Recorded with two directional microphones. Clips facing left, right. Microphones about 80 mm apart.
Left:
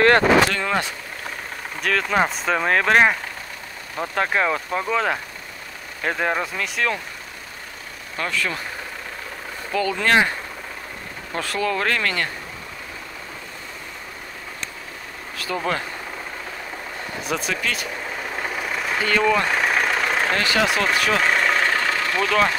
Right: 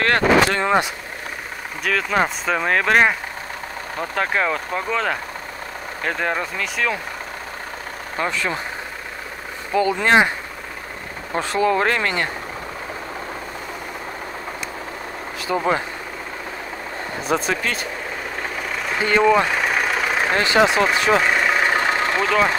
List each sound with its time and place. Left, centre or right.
0.5 s speech: right
1.8 s speech: centre
8.2 s speech: right
9.7 s speech: centre
11.3 s speech: right
15.3 s speech: centre
17.3 s speech: right
18.7 s vehicle: centre
18.9 s speech: centre
19.4 s vehicle: centre
20.3 s speech: right
21.2 s vehicle: centre; by 22.3 s right